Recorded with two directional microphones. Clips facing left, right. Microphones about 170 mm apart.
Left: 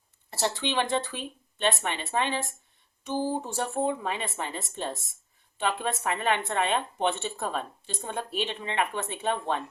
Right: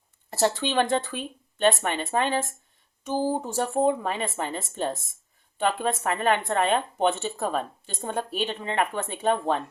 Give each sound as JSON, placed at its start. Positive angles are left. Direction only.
{"t": 0.3, "sound": "speech", "side_deg": -45}